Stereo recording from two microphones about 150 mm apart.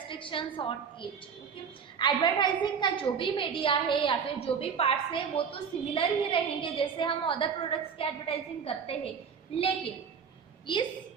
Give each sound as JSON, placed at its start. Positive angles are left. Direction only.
{"t": 0.1, "sound": "a woman's voice", "side_deg": 35}
{"t": 10.7, "sound": "a woman's voice", "side_deg": 30}